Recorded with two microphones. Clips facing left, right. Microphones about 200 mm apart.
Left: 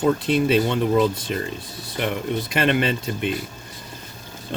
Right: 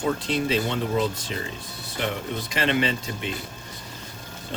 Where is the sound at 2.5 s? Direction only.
55° left (ahead or behind).